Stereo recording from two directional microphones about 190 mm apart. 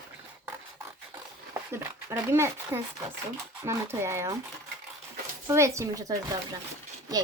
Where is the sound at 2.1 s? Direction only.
10° right (ahead or behind).